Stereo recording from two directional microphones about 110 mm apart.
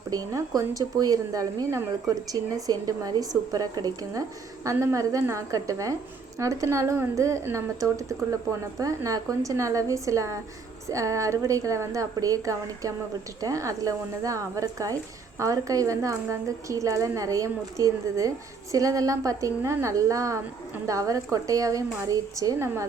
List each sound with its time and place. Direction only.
0.1 s a woman's voice: 30° right (ahead or behind)